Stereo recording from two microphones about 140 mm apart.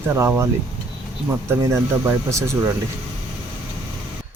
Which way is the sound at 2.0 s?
20° right (ahead or behind).